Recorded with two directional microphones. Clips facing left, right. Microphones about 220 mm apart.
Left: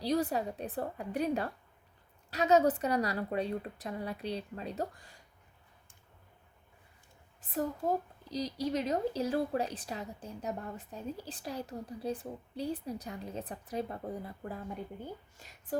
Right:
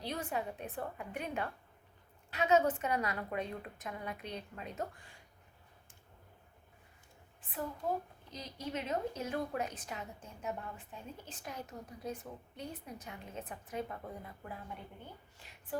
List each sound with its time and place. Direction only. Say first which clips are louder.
0.0 s a woman's voice: left 8 dB; 35° left (ahead or behind)
7.4 s a woman's voice: left 5 dB; 40° left (ahead or behind)